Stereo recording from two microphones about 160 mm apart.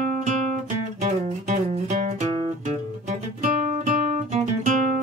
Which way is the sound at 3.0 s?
45° right (ahead or behind).